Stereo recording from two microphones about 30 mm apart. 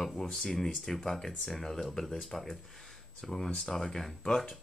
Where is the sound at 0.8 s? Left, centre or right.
Centre.